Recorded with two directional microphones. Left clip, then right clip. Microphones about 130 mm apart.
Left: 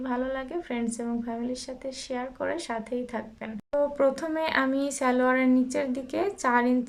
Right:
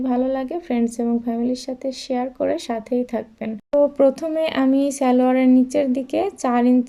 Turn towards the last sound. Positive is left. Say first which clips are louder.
# right 5 dB
turn(degrees=-25)  # may be behind; listen again after turning